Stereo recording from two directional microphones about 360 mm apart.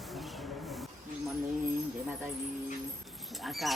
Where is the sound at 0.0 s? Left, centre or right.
Centre.